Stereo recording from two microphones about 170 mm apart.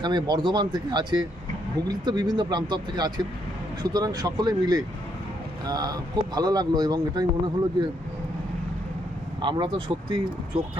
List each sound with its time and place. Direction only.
0.0 s speech: 25° right (ahead or behind)
9.4 s speech: 25° right (ahead or behind)